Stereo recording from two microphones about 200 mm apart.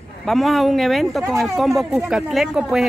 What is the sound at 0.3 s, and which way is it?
Speech, centre (ahead or behind).